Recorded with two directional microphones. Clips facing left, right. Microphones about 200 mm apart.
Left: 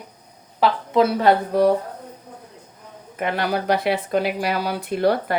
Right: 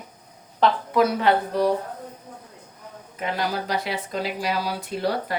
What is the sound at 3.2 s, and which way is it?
Speech, 60° left (ahead or behind).